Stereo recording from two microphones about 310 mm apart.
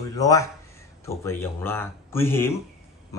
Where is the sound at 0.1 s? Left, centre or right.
Centre.